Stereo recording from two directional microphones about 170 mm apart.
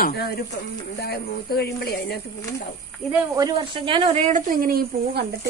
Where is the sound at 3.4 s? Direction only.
25° right (ahead or behind).